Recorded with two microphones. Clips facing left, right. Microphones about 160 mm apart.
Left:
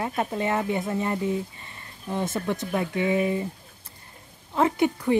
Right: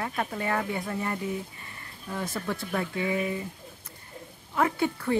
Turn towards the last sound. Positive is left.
turn(degrees=20)  # may be behind; listen again after turning